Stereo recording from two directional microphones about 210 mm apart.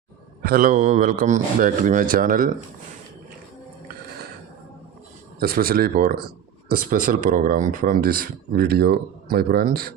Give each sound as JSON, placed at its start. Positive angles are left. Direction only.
{"t": 0.4, "sound": "speech", "side_deg": -45}
{"t": 5.4, "sound": "speech", "side_deg": -45}